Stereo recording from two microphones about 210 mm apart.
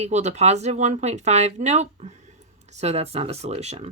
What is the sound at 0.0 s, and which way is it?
Speech, 30° right (ahead or behind).